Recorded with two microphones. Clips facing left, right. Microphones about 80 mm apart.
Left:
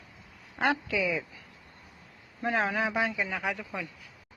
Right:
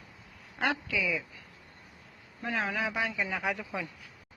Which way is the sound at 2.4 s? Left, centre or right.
Left.